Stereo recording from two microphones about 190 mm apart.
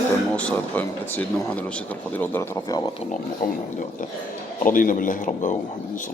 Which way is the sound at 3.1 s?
45° left (ahead or behind).